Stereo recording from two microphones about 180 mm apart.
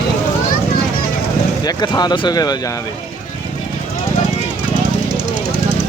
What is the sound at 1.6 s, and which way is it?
Speech, 25° left (ahead or behind).